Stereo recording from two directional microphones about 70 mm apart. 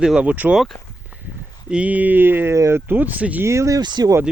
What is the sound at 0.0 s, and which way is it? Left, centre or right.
Speech, centre.